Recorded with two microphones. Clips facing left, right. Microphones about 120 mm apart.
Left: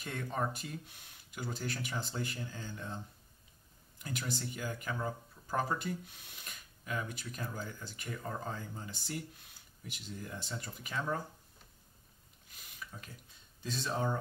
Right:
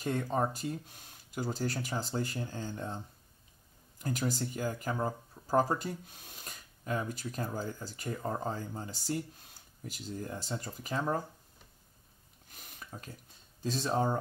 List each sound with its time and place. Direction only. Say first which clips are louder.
0.0 s speech: right 6 dB; 35° right (ahead or behind)
4.0 s speech: right 6 dB; 40° right (ahead or behind)
12.4 s a sound: right 1 dB; 40° right (ahead or behind)
13.6 s speech: right 5 dB; 40° right (ahead or behind)